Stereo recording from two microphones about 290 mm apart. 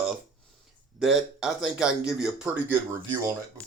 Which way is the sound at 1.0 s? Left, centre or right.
Centre.